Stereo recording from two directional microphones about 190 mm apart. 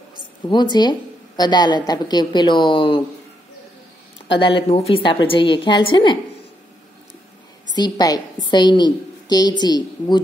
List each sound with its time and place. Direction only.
0.5 s a woman's voice: 25° left (ahead or behind)
4.4 s a woman's voice: 25° left (ahead or behind)
7.7 s a woman's voice: 20° left (ahead or behind)